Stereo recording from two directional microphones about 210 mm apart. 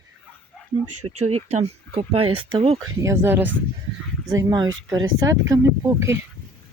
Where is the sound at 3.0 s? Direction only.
10° right (ahead or behind).